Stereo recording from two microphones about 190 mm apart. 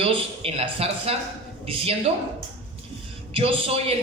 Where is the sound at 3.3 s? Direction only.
30° right (ahead or behind).